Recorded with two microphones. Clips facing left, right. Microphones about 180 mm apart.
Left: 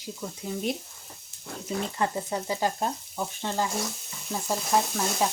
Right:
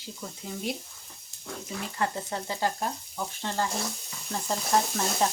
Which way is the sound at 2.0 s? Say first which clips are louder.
Right 1 dB; 15° left (ahead or behind).